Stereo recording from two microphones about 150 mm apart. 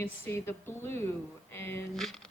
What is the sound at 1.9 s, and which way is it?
Speech, 5° left (ahead or behind).